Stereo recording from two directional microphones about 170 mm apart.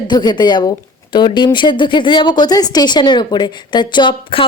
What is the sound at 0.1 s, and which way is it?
A woman's voice, 25° left (ahead or behind).